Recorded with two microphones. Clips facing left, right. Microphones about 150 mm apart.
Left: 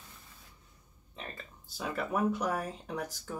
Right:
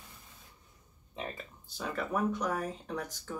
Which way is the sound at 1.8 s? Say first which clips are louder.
Left 1 dB; 5° left (ahead or behind).